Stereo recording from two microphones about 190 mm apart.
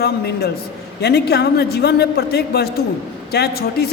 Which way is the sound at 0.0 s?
55° left (ahead or behind).